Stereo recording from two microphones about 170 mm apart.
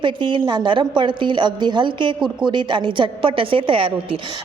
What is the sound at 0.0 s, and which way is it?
A woman's voice, 30° right (ahead or behind).